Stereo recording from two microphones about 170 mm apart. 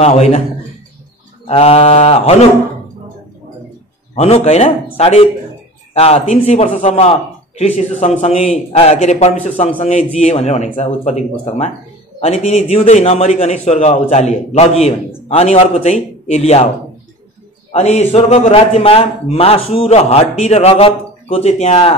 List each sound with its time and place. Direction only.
0.0 s a man's voice: 40° left (ahead or behind)
1.5 s a man's voice: 35° left (ahead or behind)
4.1 s a man's voice: 35° left (ahead or behind)
17.7 s a man's voice: 40° left (ahead or behind)